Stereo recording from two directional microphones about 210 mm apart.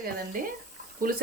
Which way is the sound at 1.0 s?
40° right (ahead or behind).